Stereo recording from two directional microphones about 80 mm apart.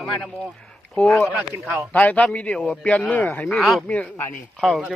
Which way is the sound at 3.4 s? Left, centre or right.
Centre.